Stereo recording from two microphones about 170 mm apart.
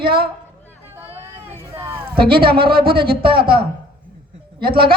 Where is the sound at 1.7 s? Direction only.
15° right (ahead or behind).